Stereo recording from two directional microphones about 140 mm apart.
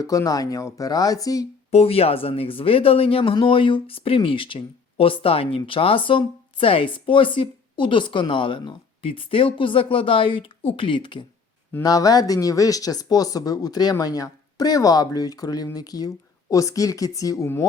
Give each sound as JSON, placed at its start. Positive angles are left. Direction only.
{"t": 0.0, "sound": "speech", "side_deg": 25}
{"t": 1.7, "sound": "speech", "side_deg": 45}